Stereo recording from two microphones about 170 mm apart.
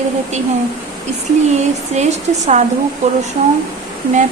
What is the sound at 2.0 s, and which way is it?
Speech, 40° right (ahead or behind).